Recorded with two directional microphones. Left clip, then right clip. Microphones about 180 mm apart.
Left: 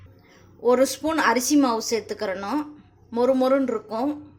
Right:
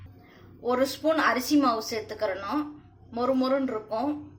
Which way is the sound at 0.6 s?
45° left (ahead or behind).